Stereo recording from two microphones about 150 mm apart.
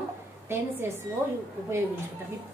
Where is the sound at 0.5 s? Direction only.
15° right (ahead or behind).